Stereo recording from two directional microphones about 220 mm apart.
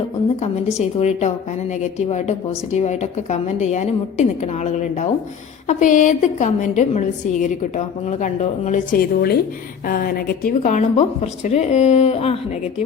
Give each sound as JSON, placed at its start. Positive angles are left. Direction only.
{"t": 0.8, "sound": "a woman's voice", "side_deg": 30}